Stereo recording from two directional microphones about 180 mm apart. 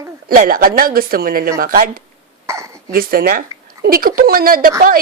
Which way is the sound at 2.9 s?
55° right (ahead or behind).